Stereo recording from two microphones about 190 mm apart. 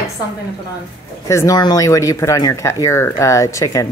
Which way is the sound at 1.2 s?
15° left (ahead or behind).